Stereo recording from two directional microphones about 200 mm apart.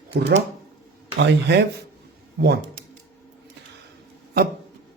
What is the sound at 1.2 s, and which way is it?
Speech, 60° right (ahead or behind).